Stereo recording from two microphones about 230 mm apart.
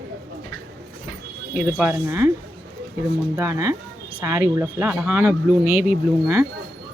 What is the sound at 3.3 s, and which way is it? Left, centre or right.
Speech, centre.